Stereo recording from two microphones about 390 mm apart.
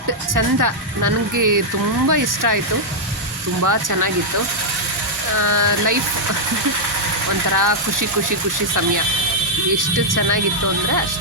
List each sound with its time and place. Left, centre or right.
0.3 s speech: right
3.6 s speech: right
5.4 s speech: right
7.5 s speech: right
9.7 s speech: right